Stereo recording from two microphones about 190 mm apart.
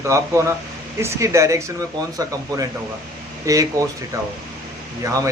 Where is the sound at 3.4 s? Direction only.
15° right (ahead or behind).